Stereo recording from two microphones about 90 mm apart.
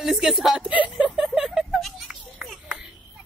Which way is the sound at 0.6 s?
15° right (ahead or behind).